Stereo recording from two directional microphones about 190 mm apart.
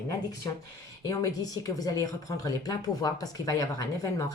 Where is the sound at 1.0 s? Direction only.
20° left (ahead or behind).